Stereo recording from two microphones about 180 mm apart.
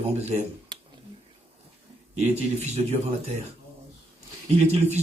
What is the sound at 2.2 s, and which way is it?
Speech, 35° right (ahead or behind).